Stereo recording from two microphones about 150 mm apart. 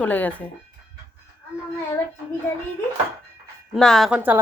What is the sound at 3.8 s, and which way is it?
Speech, centre (ahead or behind).